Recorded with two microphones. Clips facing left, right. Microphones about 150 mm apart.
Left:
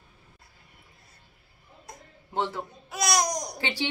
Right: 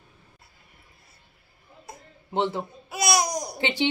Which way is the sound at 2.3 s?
25° right (ahead or behind).